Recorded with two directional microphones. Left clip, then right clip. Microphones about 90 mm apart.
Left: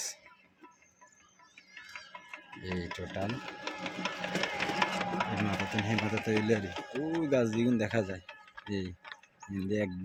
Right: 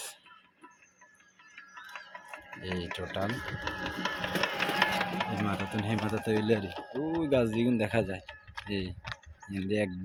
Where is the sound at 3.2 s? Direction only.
40° right (ahead or behind).